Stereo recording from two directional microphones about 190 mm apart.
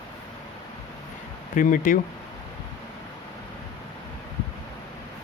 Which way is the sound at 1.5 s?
45° left (ahead or behind).